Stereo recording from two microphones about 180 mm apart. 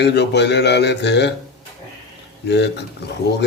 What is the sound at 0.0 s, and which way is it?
Speech, 70° left (ahead or behind).